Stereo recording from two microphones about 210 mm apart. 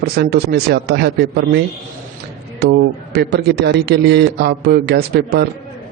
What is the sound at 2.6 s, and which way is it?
A man's voice, 50° right (ahead or behind).